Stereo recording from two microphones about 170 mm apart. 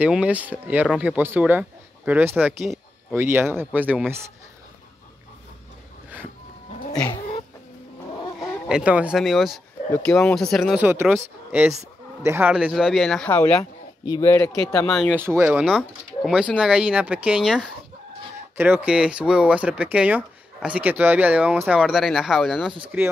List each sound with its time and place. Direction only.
0.0 s speech: 10° right (ahead or behind)
8.4 s speech: 5° right (ahead or behind)
10.8 s speech: 15° right (ahead or behind)
12.2 s speech: 15° right (ahead or behind); by 13.7 s 5° left (ahead or behind)
14.0 s speech: 20° left (ahead or behind)
14.9 s speech: centre (ahead or behind)
15.1 s speech: 15° right (ahead or behind)
18.6 s speech: 10° right (ahead or behind)